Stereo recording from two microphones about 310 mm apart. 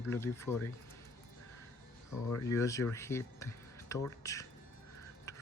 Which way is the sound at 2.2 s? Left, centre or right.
Centre.